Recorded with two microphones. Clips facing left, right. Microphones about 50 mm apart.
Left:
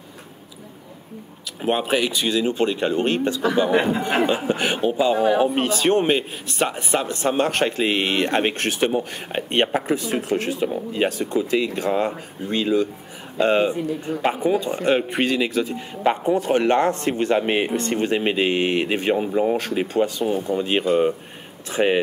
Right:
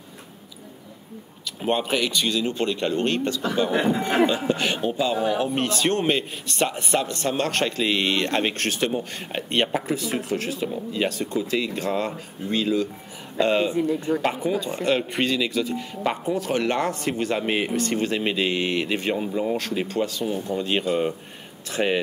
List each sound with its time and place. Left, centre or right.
1.6 s speech: centre; by 5.4 s left
5.4 s speech: centre
13.7 s speech: centre
14.4 s speech: left